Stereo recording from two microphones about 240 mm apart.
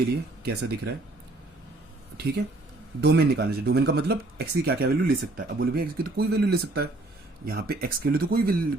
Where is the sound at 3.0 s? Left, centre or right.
Right.